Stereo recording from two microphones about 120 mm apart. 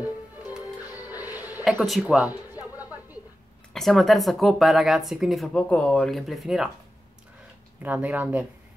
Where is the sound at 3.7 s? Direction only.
Centre (ahead or behind).